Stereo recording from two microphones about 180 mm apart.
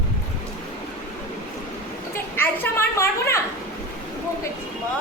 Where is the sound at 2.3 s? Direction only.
10° left (ahead or behind).